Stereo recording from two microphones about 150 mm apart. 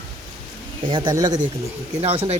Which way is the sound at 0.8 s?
30° right (ahead or behind).